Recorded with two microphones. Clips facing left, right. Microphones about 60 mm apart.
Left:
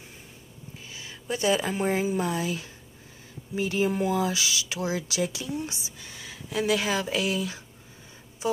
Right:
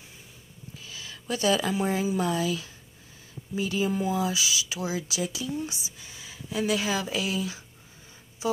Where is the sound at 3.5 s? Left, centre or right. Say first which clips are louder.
Left 2 dB; left.